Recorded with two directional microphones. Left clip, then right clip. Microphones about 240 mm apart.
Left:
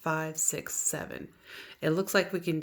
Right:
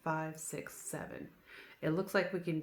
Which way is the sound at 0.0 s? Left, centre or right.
Left.